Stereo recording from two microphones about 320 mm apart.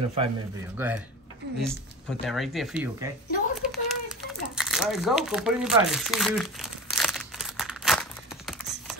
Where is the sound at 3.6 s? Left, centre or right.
Centre.